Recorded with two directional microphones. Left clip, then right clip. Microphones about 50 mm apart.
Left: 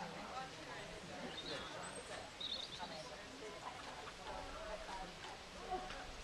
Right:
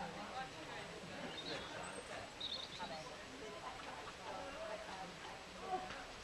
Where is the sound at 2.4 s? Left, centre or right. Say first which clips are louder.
Left 1 dB; centre.